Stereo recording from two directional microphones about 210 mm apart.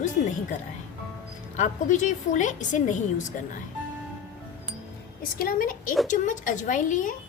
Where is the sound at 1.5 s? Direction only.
35° left (ahead or behind).